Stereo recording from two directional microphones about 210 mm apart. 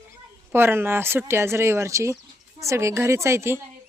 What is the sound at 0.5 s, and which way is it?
Speech, 10° right (ahead or behind).